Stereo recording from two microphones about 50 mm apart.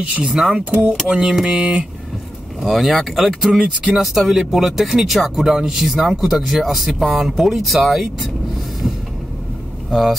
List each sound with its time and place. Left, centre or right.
0.2 s speech: centre
2.6 s speech: centre
9.8 s speech: centre